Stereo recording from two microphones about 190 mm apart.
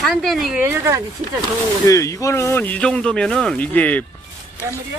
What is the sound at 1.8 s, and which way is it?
Speech, 15° left (ahead or behind).